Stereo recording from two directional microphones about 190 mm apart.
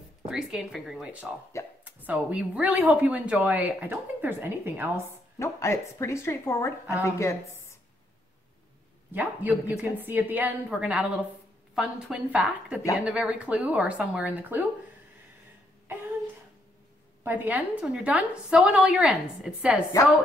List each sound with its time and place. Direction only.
0.3 s speech: 5° right (ahead or behind)
1.5 s a woman's voice: 15° left (ahead or behind)
2.0 s speech: 10° right (ahead or behind)
5.4 s a woman's voice: 15° left (ahead or behind)
9.1 s a woman's voice: 10° right (ahead or behind)
17.2 s a woman's voice: 10° right (ahead or behind)